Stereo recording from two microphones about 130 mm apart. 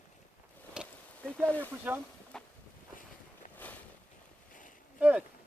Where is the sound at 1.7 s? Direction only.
15° right (ahead or behind).